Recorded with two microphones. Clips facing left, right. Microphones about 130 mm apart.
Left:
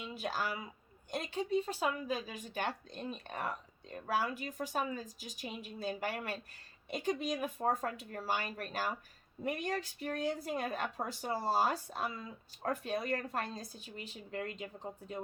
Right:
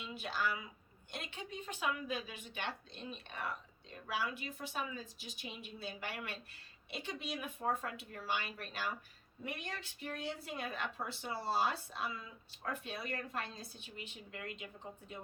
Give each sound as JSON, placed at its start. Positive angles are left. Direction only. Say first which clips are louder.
{"t": 0.0, "sound": "a woman's voice", "louder": "left 1 dB", "side_deg": 40}